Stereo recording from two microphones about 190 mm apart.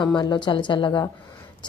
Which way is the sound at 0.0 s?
25° left (ahead or behind).